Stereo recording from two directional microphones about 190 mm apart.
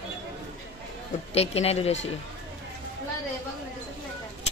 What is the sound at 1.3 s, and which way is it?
Speech, 35° left (ahead or behind).